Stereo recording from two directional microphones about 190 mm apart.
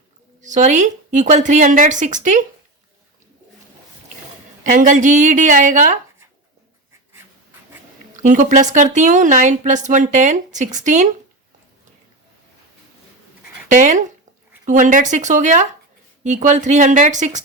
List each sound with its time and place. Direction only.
0.4 s speech: 40° right (ahead or behind)
4.6 s a woman's voice: 45° right (ahead or behind)
8.1 s speech: 40° right (ahead or behind)
13.7 s speech: 40° right (ahead or behind)